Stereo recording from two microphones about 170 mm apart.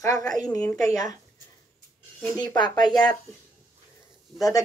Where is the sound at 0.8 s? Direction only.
20° left (ahead or behind).